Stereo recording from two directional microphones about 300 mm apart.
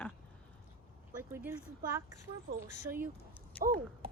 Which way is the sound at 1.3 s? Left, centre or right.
Centre.